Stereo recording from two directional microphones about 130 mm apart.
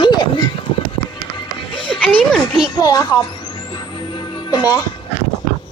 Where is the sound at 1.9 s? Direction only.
5° left (ahead or behind).